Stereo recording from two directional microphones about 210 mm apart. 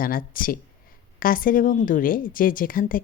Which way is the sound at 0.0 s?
40° left (ahead or behind).